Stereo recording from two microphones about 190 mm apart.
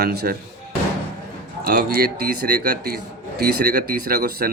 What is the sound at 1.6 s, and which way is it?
Speech, 55° right (ahead or behind).